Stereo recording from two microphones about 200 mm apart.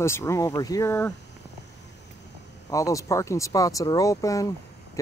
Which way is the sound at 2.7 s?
15° left (ahead or behind).